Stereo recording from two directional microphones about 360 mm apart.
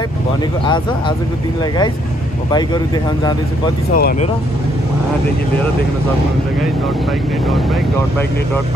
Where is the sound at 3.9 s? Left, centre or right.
Left.